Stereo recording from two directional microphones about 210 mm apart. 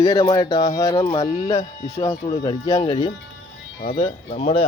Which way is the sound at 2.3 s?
15° left (ahead or behind).